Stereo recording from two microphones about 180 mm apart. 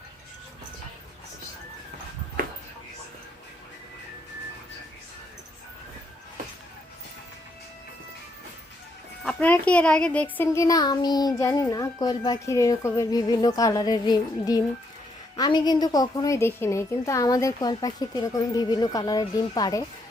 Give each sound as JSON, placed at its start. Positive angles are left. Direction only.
{"t": 9.2, "sound": "a woman's voice", "side_deg": 10}